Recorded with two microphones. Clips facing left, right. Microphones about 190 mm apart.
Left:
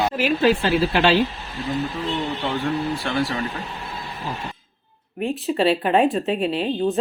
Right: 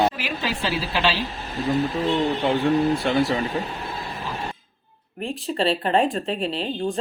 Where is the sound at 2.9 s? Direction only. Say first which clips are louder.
Right 3 dB; 20° right (ahead or behind).